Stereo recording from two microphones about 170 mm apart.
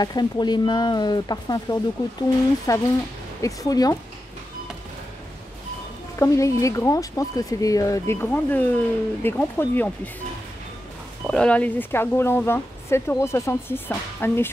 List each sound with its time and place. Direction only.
0.0 s speech: 25° left (ahead or behind)
6.1 s speech: 20° left (ahead or behind)
11.2 s speech: 5° left (ahead or behind)